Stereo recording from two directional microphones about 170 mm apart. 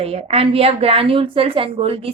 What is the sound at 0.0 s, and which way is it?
Speech, 35° right (ahead or behind).